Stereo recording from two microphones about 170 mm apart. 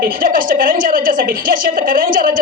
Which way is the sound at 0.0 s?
55° right (ahead or behind).